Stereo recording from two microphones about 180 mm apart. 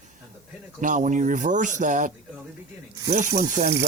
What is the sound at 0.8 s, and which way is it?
Speech, 45° right (ahead or behind).